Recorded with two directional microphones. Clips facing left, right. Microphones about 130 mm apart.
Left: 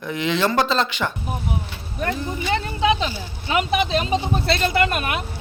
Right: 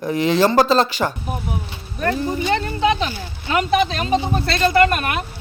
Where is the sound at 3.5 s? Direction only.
15° left (ahead or behind).